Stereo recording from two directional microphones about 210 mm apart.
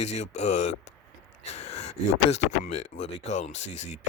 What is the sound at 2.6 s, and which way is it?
A man's voice, 30° left (ahead or behind).